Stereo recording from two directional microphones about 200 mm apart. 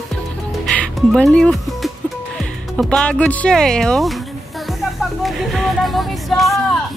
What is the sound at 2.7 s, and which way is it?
Speech, 5° left (ahead or behind).